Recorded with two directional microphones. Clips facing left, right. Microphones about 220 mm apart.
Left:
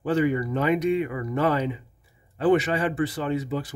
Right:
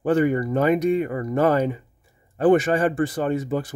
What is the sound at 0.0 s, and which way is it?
Speech, 50° right (ahead or behind).